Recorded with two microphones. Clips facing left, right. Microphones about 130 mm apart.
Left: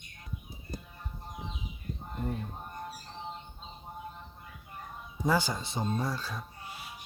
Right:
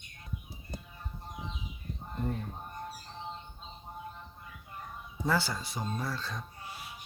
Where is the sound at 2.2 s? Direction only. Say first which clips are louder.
Right 1 dB; 5° left (ahead or behind).